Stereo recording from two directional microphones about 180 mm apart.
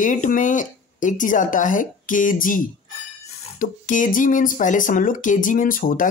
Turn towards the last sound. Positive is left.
turn(degrees=50)  # may be behind; listen again after turning